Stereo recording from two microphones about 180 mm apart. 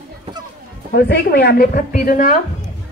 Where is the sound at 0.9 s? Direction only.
65° left (ahead or behind).